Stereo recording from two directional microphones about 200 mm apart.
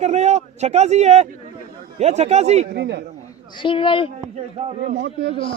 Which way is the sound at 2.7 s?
60° right (ahead or behind).